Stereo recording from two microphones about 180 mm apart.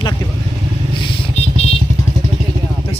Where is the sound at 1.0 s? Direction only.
30° left (ahead or behind).